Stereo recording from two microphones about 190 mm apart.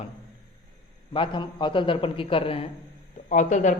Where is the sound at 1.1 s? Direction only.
25° left (ahead or behind).